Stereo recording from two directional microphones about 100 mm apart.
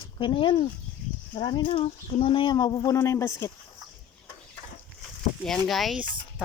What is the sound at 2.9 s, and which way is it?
Speech, 30° left (ahead or behind).